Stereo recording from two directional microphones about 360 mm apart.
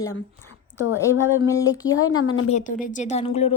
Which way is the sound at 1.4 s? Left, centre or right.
Centre.